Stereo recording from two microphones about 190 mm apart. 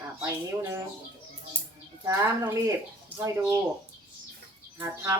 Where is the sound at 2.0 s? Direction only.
15° right (ahead or behind).